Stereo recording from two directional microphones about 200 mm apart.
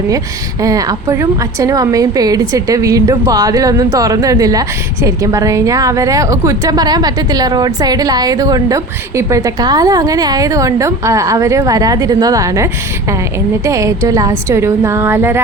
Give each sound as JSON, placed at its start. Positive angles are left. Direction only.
{"t": 0.6, "sound": "a woman's voice", "side_deg": -15}
{"t": 13.7, "sound": "a woman's voice", "side_deg": -15}